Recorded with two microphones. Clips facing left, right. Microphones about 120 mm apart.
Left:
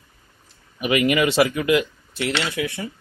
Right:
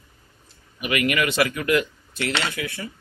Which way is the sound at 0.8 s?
25° left (ahead or behind).